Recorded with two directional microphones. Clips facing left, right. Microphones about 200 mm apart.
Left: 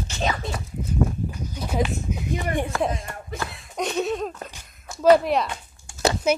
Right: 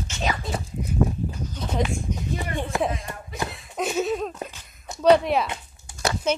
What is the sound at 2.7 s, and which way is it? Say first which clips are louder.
Speech: right 2 dB; 20° right (ahead or behind).